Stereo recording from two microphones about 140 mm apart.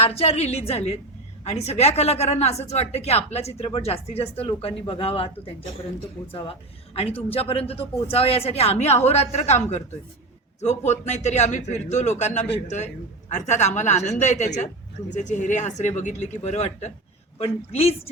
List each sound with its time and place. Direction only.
0.0 s a woman's voice: 45° left (ahead or behind)
10.6 s a man's voice: 55° left (ahead or behind)